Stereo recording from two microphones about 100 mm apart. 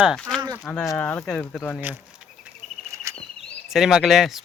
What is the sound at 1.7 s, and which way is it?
Speech, 20° right (ahead or behind).